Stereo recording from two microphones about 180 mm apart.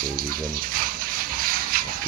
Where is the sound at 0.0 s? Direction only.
55° right (ahead or behind).